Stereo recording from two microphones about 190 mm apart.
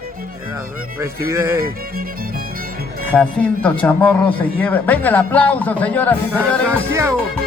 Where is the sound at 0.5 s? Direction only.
15° right (ahead or behind).